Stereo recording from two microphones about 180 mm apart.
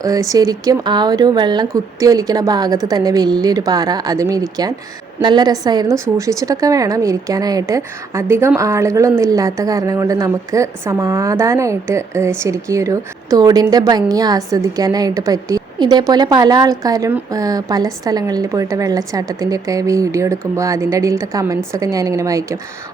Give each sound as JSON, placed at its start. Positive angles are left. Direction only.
{"t": 0.0, "sound": "a woman's voice", "side_deg": -20}